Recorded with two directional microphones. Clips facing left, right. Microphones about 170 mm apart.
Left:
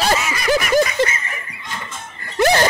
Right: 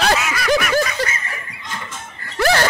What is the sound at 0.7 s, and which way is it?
Snicker, 20° left (ahead or behind).